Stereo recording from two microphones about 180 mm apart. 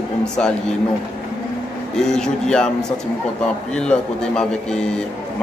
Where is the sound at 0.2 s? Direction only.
5° left (ahead or behind).